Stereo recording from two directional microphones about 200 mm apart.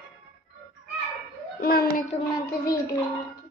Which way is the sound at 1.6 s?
50° left (ahead or behind).